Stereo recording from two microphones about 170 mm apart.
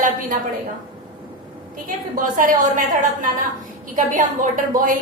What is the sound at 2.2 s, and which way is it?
A woman's voice, 50° right (ahead or behind).